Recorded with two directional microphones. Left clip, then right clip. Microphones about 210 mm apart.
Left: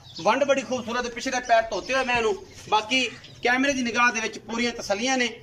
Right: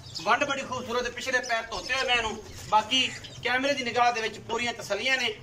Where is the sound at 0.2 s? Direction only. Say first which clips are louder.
Left 4 dB; 50° left (ahead or behind).